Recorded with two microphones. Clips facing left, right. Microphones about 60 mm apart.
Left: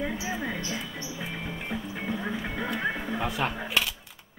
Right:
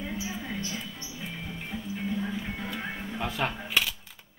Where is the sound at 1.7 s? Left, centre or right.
Left.